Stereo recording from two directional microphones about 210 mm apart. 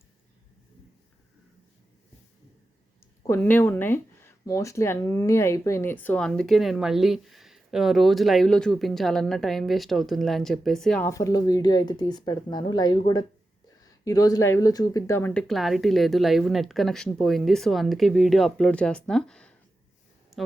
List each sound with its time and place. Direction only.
3.2 s speech: 10° left (ahead or behind)
11.1 s speech: 15° left (ahead or behind)
20.3 s a sound: centre (ahead or behind)